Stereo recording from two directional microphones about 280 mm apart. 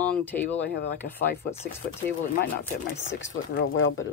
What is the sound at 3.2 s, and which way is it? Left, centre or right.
Speech, left.